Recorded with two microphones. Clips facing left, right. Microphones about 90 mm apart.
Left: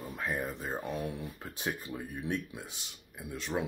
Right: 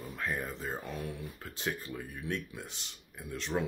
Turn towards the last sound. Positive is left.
turn(degrees=5)  # may be behind; listen again after turning